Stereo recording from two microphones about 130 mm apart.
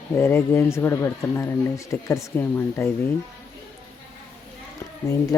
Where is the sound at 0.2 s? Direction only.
15° left (ahead or behind).